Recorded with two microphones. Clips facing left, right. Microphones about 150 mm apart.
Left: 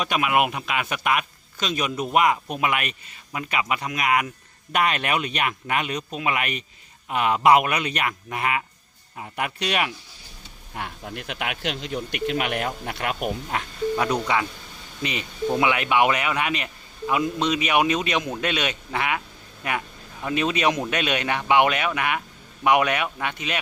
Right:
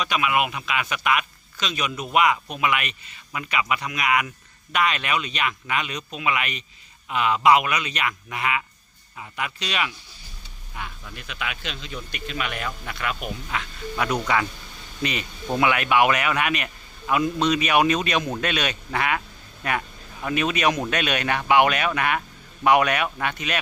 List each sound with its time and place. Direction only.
0.0 s a man's voice: 50° left (ahead or behind)
13.9 s speech: 20° left (ahead or behind)